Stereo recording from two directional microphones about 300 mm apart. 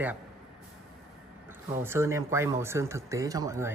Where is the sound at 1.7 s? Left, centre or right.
Centre.